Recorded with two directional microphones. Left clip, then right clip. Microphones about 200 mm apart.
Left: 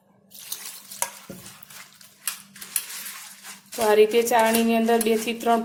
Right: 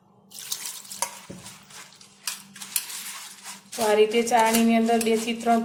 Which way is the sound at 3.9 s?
35° left (ahead or behind).